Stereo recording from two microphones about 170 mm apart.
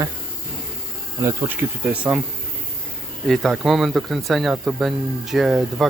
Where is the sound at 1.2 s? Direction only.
15° right (ahead or behind).